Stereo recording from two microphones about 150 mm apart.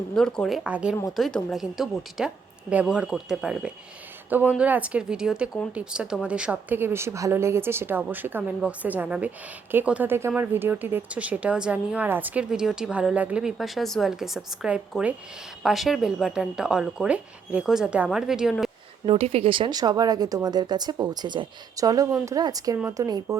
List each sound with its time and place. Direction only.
0.1 s speech: 5° left (ahead or behind)
19.0 s speech: 40° right (ahead or behind); by 23.4 s 25° right (ahead or behind)